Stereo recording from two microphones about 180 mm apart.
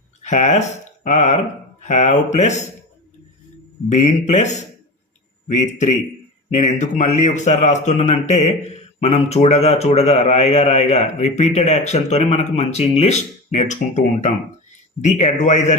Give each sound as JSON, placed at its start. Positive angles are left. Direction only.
{"t": 0.2, "sound": "speech", "side_deg": 40}
{"t": 3.8, "sound": "speech", "side_deg": 40}